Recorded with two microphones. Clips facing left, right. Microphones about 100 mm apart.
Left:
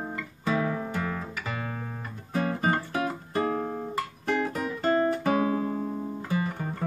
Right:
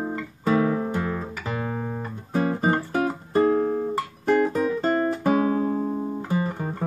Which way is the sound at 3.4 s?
15° right (ahead or behind).